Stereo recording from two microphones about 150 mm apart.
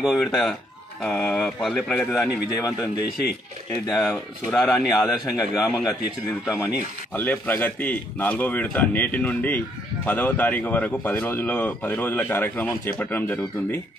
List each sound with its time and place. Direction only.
0.0 s speech: centre (ahead or behind)
2.5 s a man's voice: 20° left (ahead or behind)
3.9 s speech: 5° left (ahead or behind)
5.4 s a man's voice: 20° left (ahead or behind)